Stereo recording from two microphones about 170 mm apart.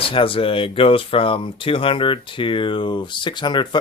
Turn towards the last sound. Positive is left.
turn(degrees=25)  # may be behind; listen again after turning